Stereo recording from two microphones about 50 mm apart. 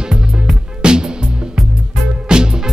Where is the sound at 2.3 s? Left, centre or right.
Centre.